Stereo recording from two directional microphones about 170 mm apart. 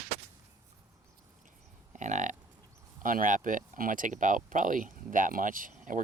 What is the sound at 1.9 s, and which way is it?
Livestock, 45° right (ahead or behind).